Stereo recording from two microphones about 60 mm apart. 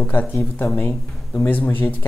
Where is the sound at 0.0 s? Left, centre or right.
Left.